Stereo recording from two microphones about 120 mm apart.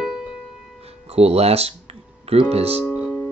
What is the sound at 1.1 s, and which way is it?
Speech, 60° right (ahead or behind).